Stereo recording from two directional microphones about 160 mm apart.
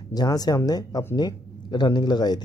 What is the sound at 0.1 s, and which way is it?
Speech, 25° left (ahead or behind).